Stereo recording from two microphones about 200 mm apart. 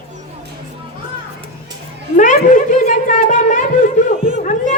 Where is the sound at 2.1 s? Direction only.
40° left (ahead or behind).